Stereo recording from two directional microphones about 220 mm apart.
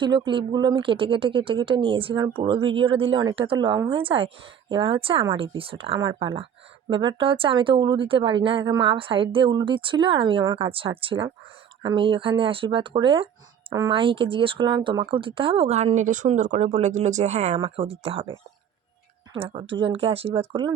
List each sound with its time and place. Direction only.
0.0 s speech: 20° right (ahead or behind)